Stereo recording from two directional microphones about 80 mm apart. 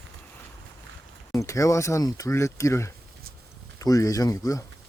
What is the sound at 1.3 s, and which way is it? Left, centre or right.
Speech, left.